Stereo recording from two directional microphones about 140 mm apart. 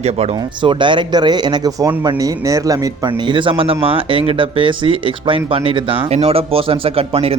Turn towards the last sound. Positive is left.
turn(degrees=-45)  # may be behind; listen again after turning